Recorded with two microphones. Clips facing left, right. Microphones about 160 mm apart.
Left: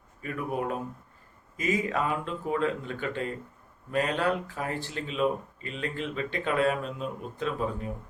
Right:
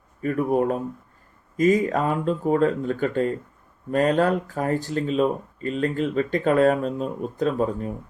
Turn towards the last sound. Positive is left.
turn(degrees=-40)  # may be behind; listen again after turning